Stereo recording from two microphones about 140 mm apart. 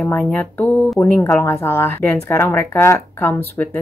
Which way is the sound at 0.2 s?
10° left (ahead or behind).